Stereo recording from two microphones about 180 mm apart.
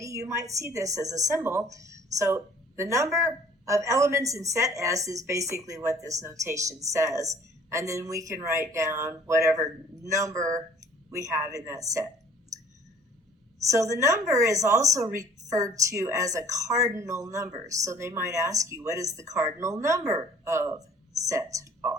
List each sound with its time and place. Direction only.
0.0 s a woman's voice: 15° right (ahead or behind)
13.7 s a woman's voice: 15° right (ahead or behind)